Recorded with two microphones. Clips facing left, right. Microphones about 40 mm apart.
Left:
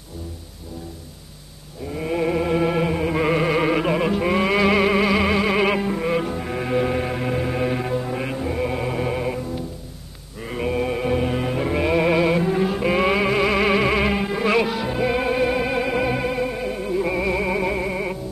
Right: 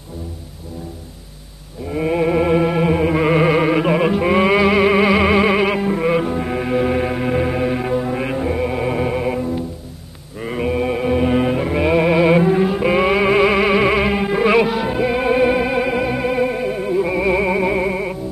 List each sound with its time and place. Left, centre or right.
1.9 s music: right
5.6 s music: centre
16.3 s music: centre